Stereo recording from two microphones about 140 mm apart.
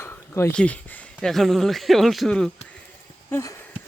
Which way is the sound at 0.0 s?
20° left (ahead or behind).